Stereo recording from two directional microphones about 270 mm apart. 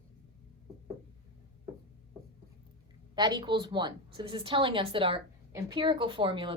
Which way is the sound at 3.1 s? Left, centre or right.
Centre.